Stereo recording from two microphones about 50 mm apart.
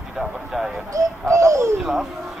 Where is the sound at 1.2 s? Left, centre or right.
Right.